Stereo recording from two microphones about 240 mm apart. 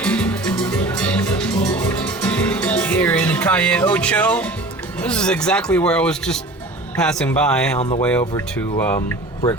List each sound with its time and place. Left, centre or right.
0.0 s music: centre
4.9 s speech: centre
7.8 s speech: left
8.0 s speech: centre